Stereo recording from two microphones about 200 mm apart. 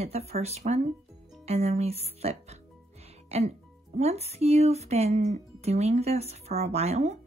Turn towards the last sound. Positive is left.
turn(degrees=-30)  # may be behind; listen again after turning